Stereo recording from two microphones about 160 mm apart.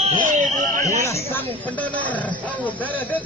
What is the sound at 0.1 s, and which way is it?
Fire alarm, 50° right (ahead or behind).